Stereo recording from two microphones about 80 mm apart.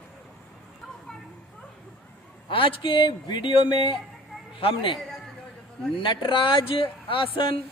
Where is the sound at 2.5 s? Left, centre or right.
Left.